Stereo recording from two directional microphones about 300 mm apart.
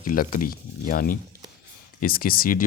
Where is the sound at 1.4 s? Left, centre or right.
Centre.